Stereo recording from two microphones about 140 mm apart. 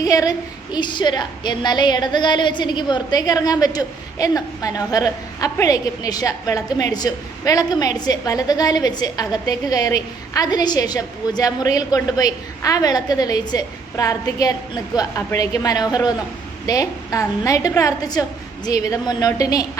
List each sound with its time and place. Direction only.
0.0 s a woman's voice: 25° left (ahead or behind)